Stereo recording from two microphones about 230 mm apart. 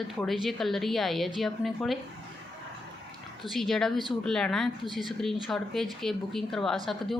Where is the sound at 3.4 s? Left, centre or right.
Centre.